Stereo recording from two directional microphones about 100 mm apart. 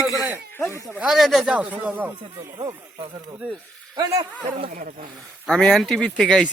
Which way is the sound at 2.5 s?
50° right (ahead or behind).